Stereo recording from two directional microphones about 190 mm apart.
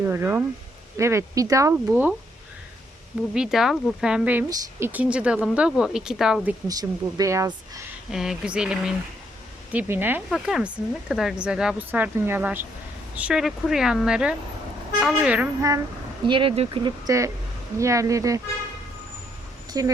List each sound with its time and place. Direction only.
0.0 s speech: 10° right (ahead or behind)
3.3 s speech: 5° right (ahead or behind)
6.7 s speech: 20° right (ahead or behind)
8.1 s speech: 5° right (ahead or behind)
16.2 s speech: 25° right (ahead or behind)
19.7 s speech: 20° right (ahead or behind)